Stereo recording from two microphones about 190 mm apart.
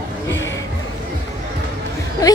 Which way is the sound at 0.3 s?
15° left (ahead or behind).